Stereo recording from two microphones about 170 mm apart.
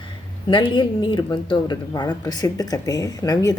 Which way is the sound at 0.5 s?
30° left (ahead or behind).